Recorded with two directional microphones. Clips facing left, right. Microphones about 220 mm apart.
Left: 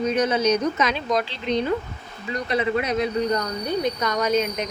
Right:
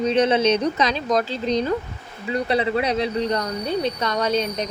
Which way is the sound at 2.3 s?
30° right (ahead or behind).